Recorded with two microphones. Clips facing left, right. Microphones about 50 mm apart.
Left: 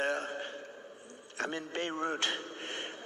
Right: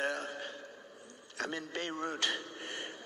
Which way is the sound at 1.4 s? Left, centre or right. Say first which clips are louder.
Left 2 dB; left.